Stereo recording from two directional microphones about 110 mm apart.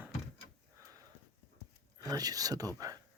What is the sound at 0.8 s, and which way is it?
Sniff, 30° right (ahead or behind).